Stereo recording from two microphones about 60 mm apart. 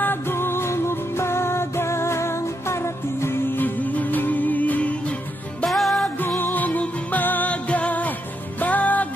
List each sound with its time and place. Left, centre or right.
0.0 s music: left
3.5 s music: left
5.7 s music: centre
6.2 s music: left